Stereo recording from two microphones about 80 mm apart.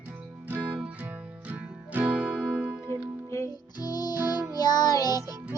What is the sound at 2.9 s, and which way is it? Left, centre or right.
Music, left.